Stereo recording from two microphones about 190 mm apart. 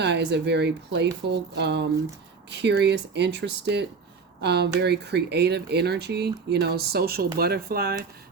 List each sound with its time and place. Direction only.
0.0 s speech: 65° right (ahead or behind)